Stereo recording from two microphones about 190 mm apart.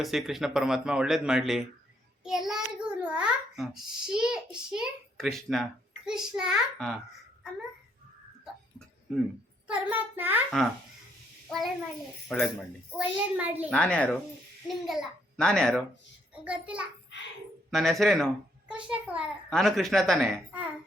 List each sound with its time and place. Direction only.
0.0 s a man's voice: centre (ahead or behind)
9.6 s a child's voice: 10° right (ahead or behind)
11.4 s a child's voice: centre (ahead or behind)
13.7 s a man's voice: 5° left (ahead or behind)